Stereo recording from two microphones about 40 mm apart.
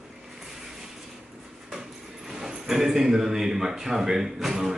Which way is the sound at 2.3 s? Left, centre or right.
Centre.